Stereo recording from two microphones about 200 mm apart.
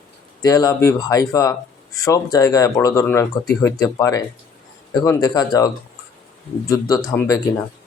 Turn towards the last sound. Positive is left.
turn(degrees=15)  # may be behind; listen again after turning